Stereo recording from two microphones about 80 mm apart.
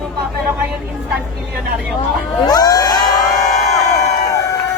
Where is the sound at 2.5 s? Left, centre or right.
Left.